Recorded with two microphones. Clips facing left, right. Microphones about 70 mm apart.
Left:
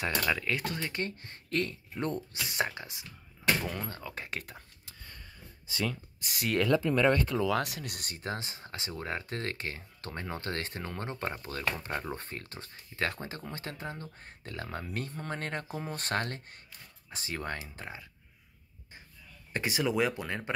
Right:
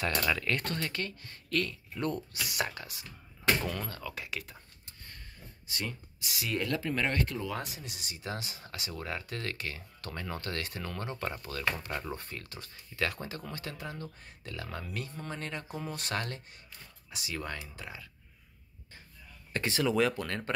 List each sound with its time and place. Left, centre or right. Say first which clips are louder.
0.0 s speech: even; centre
1.0 s speech: left 3 dB; left; by 3.9 s centre
3.9 s speech: even; left
6.2 s speech: left 3 dB; left
7.5 s speech: left 7 dB; left
19.5 s speech: right 1 dB; centre